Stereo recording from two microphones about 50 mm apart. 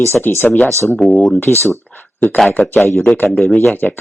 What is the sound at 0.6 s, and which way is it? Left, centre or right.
Speech, right.